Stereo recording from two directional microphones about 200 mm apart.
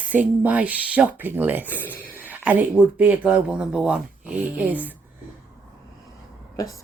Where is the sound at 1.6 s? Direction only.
10° left (ahead or behind).